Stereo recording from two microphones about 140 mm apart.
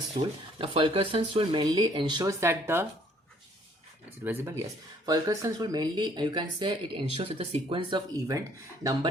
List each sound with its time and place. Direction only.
0.2 s speech: 40° right (ahead or behind)
2.4 s speech: 15° right (ahead or behind)
4.2 s speech: 15° right (ahead or behind)